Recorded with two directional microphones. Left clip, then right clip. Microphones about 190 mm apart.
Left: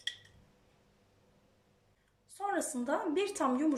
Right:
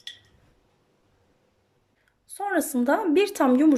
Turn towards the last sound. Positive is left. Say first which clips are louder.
# right 11 dB
turn(degrees=-55)  # may be behind; listen again after turning